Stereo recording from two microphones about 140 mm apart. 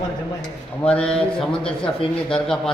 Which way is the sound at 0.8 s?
5° left (ahead or behind).